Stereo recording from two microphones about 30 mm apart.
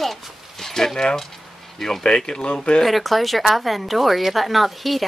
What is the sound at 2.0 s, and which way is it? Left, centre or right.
Speech, left.